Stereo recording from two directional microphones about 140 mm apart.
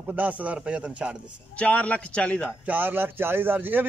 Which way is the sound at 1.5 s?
10° left (ahead or behind).